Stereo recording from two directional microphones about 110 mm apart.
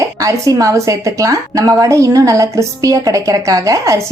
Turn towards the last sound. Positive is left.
turn(degrees=-30)  # may be behind; listen again after turning